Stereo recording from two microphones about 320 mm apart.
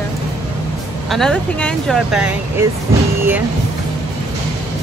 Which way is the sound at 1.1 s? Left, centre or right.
Centre.